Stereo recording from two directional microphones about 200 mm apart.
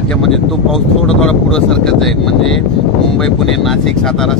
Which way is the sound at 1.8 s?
Centre (ahead or behind).